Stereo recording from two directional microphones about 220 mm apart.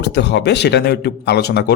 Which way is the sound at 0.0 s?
50° left (ahead or behind).